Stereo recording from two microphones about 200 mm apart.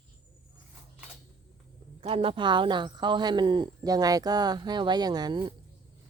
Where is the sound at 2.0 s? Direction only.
30° right (ahead or behind).